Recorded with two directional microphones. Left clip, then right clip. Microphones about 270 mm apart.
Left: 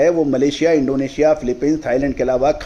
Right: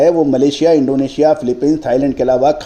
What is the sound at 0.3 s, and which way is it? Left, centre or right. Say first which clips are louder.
Speech: right 4 dB; centre.